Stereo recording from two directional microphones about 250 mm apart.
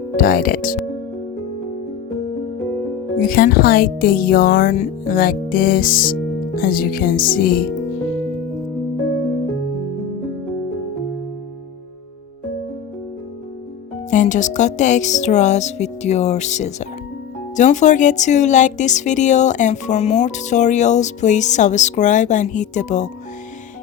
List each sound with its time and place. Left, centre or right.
0.2 s speech: left
3.2 s speech: left
14.1 s speech: left